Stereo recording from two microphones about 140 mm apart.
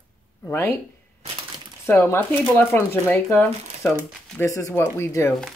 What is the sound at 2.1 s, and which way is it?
Speech, 15° left (ahead or behind).